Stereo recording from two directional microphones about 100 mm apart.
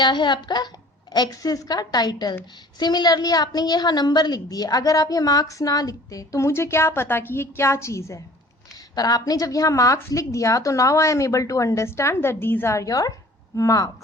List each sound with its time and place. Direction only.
0.0 s a woman's voice: 50° left (ahead or behind); by 8.2 s 30° left (ahead or behind)
8.7 s a woman's voice: 40° left (ahead or behind)